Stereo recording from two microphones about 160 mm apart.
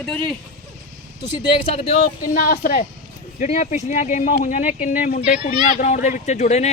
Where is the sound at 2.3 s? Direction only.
60° left (ahead or behind).